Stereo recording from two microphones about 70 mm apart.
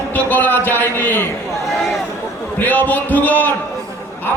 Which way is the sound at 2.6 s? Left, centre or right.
Left.